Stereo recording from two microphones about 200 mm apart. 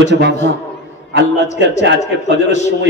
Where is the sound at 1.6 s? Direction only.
60° right (ahead or behind).